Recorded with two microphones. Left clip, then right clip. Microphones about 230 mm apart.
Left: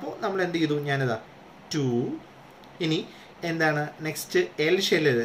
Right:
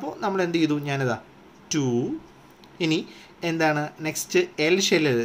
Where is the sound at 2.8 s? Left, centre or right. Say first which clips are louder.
Right 3 dB; right.